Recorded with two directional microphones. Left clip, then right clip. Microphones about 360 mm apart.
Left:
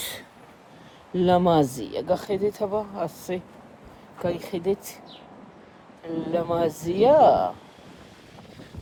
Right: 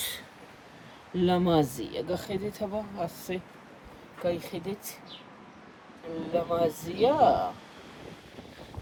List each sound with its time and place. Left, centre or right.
0.0 s a sound: centre
1.1 s speech: centre
6.3 s speech: left